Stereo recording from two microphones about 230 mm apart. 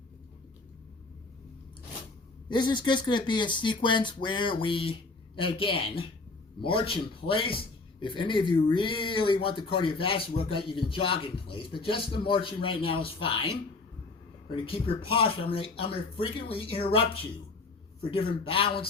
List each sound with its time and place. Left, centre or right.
2.5 s speech: centre
18.1 s speech: left